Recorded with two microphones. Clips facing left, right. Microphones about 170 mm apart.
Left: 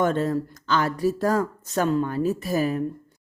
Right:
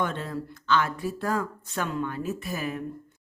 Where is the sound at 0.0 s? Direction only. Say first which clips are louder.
Left 8 dB; 40° left (ahead or behind).